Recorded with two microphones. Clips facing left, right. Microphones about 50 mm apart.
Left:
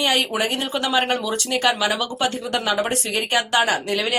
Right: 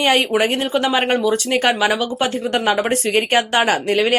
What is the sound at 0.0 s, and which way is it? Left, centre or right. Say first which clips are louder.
Speech: right 5 dB; right.